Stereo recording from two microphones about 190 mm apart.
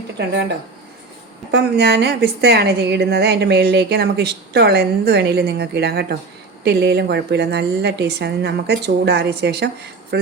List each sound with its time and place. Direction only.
1.5 s a woman's voice: 60° right (ahead or behind)